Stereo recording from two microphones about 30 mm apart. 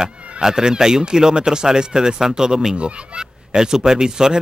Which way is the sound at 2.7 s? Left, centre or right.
Right.